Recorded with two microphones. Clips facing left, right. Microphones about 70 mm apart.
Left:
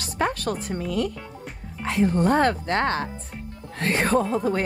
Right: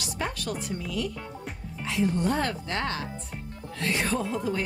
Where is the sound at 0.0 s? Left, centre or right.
Left.